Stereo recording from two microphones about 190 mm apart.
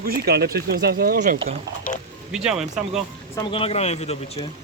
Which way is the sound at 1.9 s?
45° left (ahead or behind).